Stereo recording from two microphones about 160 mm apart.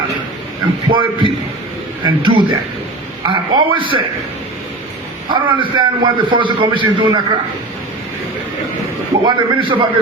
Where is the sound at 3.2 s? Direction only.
30° right (ahead or behind).